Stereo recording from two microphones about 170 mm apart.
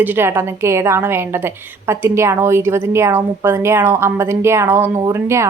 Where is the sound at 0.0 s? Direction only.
10° right (ahead or behind).